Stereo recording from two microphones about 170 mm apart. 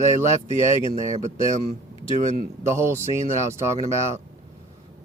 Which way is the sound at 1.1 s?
45° right (ahead or behind).